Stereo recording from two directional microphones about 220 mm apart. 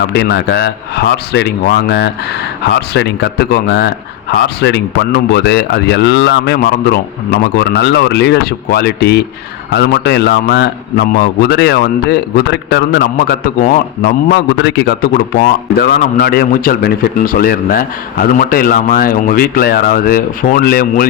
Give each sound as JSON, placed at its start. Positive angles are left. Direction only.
{"t": 0.0, "sound": "a man's voice", "side_deg": 50}